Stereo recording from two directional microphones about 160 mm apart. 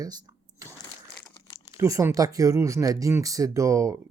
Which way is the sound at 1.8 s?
20° right (ahead or behind).